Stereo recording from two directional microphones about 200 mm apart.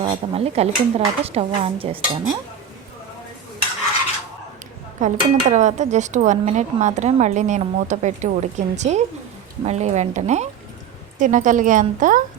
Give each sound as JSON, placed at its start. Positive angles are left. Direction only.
{"t": 0.0, "sound": "speech", "side_deg": -30}
{"t": 4.9, "sound": "speech", "side_deg": -40}